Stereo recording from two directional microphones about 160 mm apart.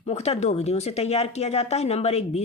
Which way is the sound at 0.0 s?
40° left (ahead or behind).